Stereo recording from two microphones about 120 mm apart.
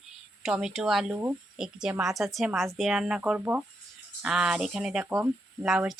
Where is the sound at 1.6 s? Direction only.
5° right (ahead or behind).